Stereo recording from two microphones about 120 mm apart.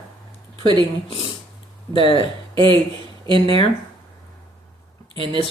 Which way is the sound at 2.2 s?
40° right (ahead or behind).